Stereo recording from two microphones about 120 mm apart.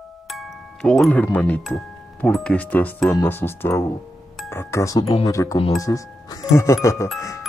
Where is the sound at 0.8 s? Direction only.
5° left (ahead or behind).